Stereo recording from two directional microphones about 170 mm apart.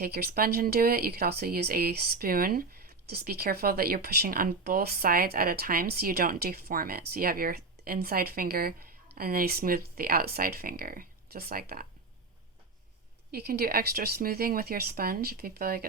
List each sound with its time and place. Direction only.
0.0 s speech: 65° right (ahead or behind)
13.3 s speech: 65° right (ahead or behind)